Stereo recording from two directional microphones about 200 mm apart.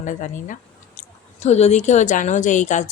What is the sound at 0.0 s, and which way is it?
Speech, 40° left (ahead or behind).